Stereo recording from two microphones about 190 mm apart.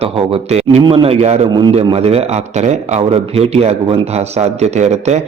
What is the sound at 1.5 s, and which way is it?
A man's voice, 20° right (ahead or behind).